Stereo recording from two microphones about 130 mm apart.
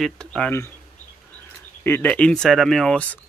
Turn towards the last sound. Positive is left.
turn(degrees=5)  # may be behind; listen again after turning